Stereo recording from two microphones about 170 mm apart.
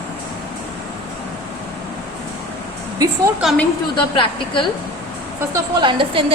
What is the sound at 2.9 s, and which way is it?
Speech, 20° right (ahead or behind).